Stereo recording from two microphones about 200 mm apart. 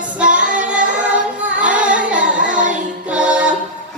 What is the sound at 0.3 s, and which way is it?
Female singing, 40° right (ahead or behind).